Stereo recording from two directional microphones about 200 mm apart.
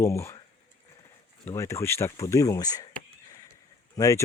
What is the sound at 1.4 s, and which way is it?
Speech, 15° left (ahead or behind).